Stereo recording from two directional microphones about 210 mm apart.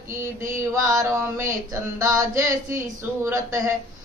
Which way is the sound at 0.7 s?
15° right (ahead or behind).